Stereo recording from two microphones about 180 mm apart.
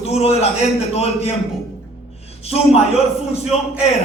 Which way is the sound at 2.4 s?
35° left (ahead or behind).